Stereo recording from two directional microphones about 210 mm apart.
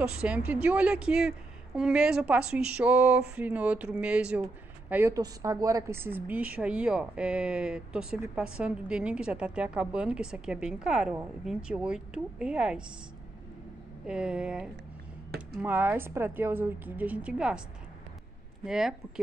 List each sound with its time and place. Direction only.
0.0 s speech: 5° right (ahead or behind)
14.0 s a woman's voice: 5° right (ahead or behind)
18.7 s speech: centre (ahead or behind)